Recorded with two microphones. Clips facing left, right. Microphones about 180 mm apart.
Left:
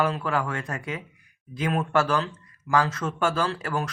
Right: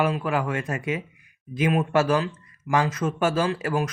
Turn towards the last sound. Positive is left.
turn(degrees=-20)  # may be behind; listen again after turning